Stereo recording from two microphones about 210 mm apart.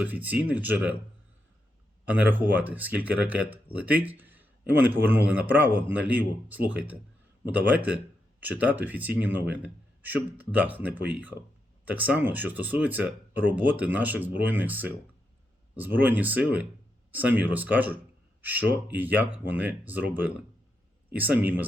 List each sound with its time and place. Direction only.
0.0 s speech: 10° right (ahead or behind)
2.0 s speech: 10° right (ahead or behind)